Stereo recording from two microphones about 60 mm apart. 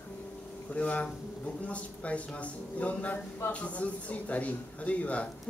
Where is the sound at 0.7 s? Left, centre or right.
Left.